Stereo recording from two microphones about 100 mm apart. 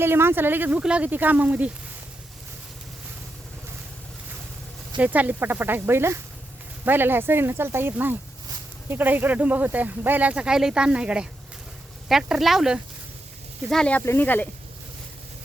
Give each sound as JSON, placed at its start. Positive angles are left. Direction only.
{"t": 0.0, "sound": "speech", "side_deg": -25}
{"t": 4.9, "sound": "speech", "side_deg": -15}
{"t": 13.7, "sound": "speech", "side_deg": 10}
{"t": 14.0, "sound": "speech", "side_deg": 20}